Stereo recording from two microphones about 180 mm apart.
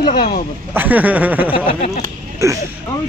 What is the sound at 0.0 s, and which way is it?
Speech, 30° left (ahead or behind).